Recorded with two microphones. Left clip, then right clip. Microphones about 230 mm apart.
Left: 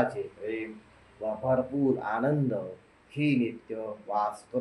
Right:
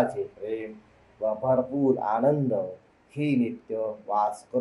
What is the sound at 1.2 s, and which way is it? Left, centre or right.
Speech, right.